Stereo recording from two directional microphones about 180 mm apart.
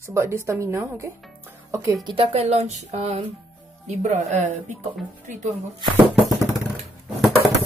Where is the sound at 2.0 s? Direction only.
30° right (ahead or behind).